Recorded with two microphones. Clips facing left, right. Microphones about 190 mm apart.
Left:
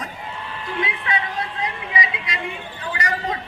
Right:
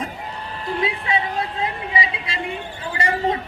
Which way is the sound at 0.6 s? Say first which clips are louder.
Right 3 dB; 35° right (ahead or behind).